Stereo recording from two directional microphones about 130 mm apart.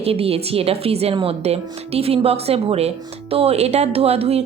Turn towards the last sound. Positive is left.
turn(degrees=-55)  # may be behind; listen again after turning